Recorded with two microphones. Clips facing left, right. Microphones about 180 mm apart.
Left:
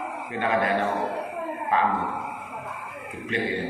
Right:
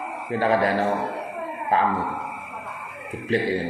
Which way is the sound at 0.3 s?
35° right (ahead or behind).